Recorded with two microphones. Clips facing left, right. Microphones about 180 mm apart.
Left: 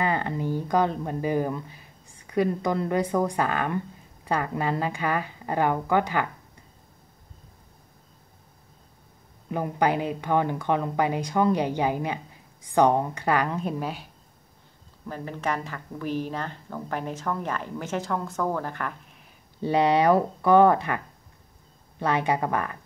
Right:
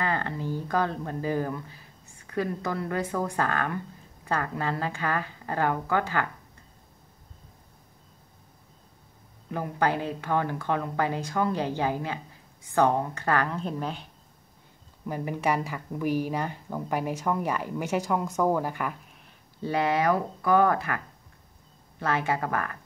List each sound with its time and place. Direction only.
0.0 s speech: 15° left (ahead or behind)
9.5 s speech: 15° left (ahead or behind)
15.0 s a woman's voice: 15° right (ahead or behind)
19.6 s speech: 20° left (ahead or behind)
22.0 s speech: 20° left (ahead or behind)